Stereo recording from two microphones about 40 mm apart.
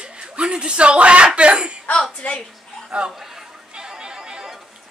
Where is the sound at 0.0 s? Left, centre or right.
Right.